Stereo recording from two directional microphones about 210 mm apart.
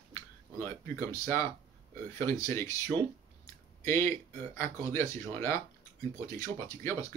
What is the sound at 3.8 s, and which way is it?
Speech, 10° left (ahead or behind).